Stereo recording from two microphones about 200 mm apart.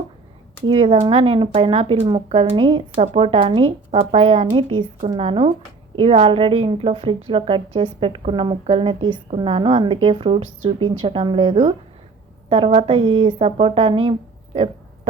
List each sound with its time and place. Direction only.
0.7 s a woman's voice: 30° right (ahead or behind)